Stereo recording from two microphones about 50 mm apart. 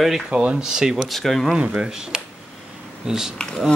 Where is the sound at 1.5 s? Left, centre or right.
Centre.